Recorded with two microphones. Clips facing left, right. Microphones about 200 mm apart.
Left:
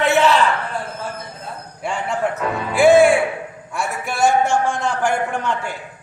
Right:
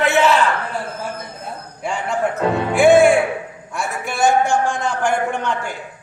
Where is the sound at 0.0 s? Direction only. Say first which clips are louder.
Even; centre (ahead or behind).